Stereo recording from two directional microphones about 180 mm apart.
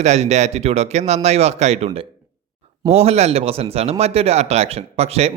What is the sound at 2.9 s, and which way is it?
A man's voice, 35° right (ahead or behind).